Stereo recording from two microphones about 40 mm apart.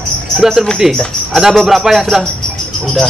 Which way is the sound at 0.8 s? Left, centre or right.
Centre.